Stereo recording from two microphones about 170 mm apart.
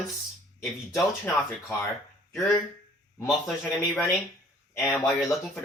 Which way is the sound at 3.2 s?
Centre (ahead or behind).